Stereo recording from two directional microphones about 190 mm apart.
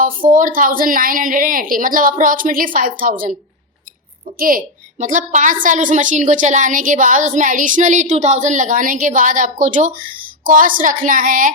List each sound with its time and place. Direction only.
0.0 s speech: 45° right (ahead or behind)
4.4 s a woman's voice: 45° right (ahead or behind)